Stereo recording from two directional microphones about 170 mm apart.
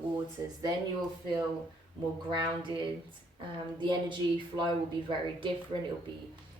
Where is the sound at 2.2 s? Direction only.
30° right (ahead or behind).